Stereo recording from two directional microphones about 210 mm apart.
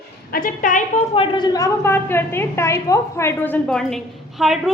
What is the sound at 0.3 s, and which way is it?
Speech, 40° left (ahead or behind).